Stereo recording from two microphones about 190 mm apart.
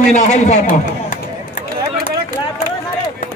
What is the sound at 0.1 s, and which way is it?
A man's voice, 40° left (ahead or behind).